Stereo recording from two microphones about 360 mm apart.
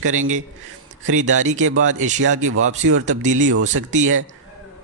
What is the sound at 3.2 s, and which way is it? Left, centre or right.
Speech, centre.